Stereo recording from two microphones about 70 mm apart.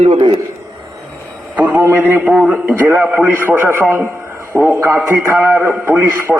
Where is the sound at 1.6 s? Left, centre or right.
Right.